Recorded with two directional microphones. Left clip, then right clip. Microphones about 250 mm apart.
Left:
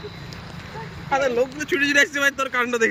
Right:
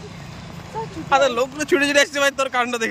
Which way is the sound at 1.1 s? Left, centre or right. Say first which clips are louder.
Right 3 dB; centre.